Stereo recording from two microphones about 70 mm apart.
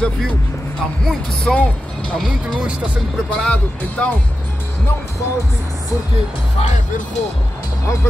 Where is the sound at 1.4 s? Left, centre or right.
Centre.